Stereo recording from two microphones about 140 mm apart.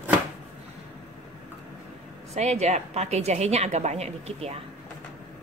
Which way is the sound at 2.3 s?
50° right (ahead or behind).